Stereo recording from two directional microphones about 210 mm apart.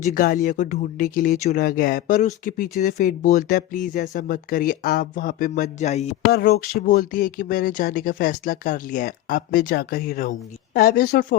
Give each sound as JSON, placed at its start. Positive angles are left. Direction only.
{"t": 0.0, "sound": "speech", "side_deg": 40}
{"t": 6.3, "sound": "speech", "side_deg": 45}